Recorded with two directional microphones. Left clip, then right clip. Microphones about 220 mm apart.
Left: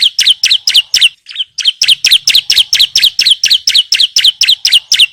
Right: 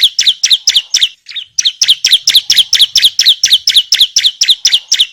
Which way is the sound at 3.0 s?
10° left (ahead or behind).